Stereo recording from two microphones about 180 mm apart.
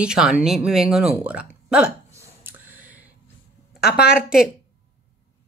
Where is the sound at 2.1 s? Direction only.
10° right (ahead or behind).